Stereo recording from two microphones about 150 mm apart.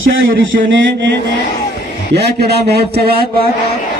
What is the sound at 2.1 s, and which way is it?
Speech, 90° right.